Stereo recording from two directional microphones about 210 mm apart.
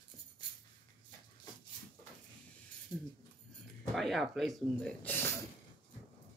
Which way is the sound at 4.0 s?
Centre (ahead or behind).